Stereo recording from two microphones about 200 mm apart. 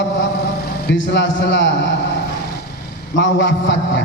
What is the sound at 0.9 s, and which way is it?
A man's voice, 65° left (ahead or behind).